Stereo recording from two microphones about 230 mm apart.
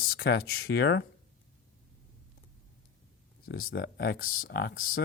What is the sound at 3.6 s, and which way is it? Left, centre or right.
Speech, left.